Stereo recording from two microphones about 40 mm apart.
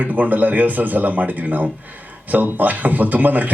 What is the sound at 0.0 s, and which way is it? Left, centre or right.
Speech, right.